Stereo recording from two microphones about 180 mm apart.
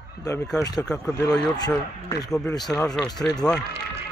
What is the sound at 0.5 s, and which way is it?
Speech, 20° left (ahead or behind).